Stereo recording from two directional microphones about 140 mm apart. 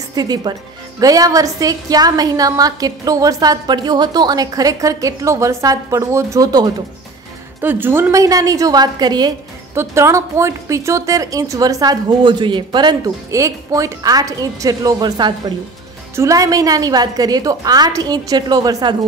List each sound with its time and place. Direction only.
0.1 s a woman's voice: 30° right (ahead or behind)
7.6 s a woman's voice: 15° right (ahead or behind)